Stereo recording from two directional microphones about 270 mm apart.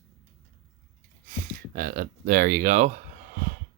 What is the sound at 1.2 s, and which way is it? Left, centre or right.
Speech, right.